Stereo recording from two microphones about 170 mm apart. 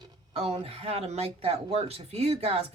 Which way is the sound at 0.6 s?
35° right (ahead or behind).